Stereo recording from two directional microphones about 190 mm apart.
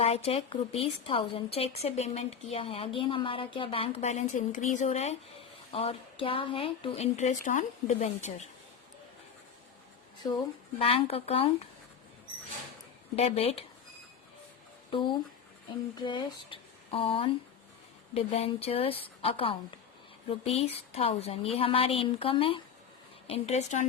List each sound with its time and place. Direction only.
0.0 s a woman's voice: 30° left (ahead or behind)
10.2 s speech: 20° left (ahead or behind)
10.8 s a woman's voice: 30° left (ahead or behind)
13.1 s a woman's voice: 30° left (ahead or behind)
16.0 s a woman's voice: 25° left (ahead or behind)